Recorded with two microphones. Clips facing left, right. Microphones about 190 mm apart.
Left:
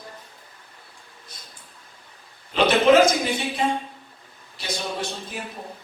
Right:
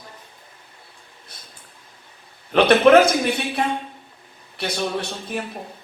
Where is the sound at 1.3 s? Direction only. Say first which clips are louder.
Right 1 dB; 60° right (ahead or behind).